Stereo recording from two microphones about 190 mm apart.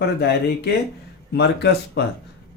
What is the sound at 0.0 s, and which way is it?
Speech, 60° left (ahead or behind).